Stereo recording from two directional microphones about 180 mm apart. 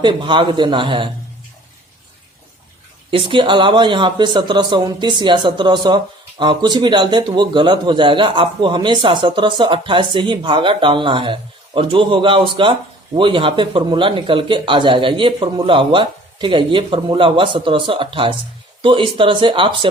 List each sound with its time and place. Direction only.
0.0 s a man's voice: 25° right (ahead or behind)
3.1 s a man's voice: 30° right (ahead or behind)